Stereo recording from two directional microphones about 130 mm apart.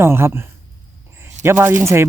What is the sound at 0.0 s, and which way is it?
Speech, 20° right (ahead or behind).